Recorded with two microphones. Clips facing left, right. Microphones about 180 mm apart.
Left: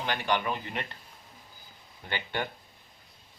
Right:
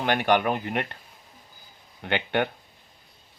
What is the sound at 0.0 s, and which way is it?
Speech, 60° right (ahead or behind).